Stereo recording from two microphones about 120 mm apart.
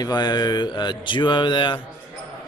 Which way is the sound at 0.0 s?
35° left (ahead or behind).